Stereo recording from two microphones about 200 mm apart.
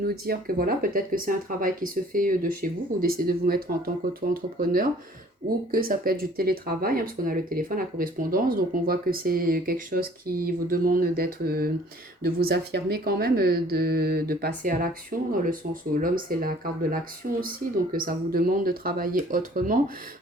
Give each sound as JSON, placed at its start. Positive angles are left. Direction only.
{"t": 0.0, "sound": "speech", "side_deg": -50}